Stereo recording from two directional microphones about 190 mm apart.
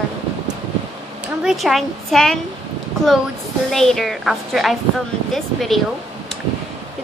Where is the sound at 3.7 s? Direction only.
Centre (ahead or behind).